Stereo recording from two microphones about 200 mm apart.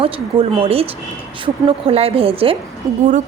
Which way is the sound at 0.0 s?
25° right (ahead or behind).